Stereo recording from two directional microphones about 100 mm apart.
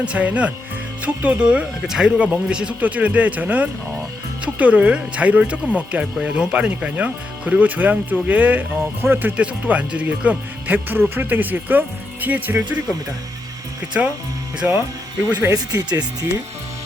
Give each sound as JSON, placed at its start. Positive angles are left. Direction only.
{"t": 0.0, "sound": "speech", "side_deg": -15}
{"t": 14.0, "sound": "speech", "side_deg": -15}
{"t": 15.5, "sound": "speech", "side_deg": -40}